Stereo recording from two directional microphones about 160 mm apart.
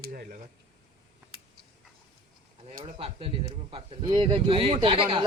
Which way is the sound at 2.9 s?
35° right (ahead or behind).